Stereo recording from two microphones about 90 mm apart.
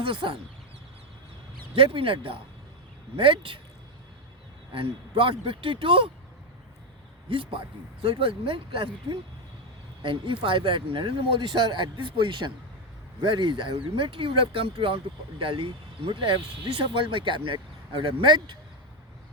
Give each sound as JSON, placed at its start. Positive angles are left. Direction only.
{"t": 0.0, "sound": "speech", "side_deg": -75}
{"t": 1.7, "sound": "speech", "side_deg": -90}
{"t": 3.2, "sound": "speech", "side_deg": -75}
{"t": 4.7, "sound": "a man's voice", "side_deg": -85}
{"t": 7.3, "sound": "a man's voice", "side_deg": -85}